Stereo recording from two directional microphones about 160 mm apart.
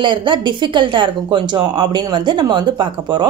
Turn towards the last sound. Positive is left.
turn(degrees=-25)  # may be behind; listen again after turning